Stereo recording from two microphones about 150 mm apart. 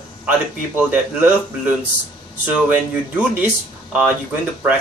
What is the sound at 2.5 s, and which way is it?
Speech, 10° right (ahead or behind).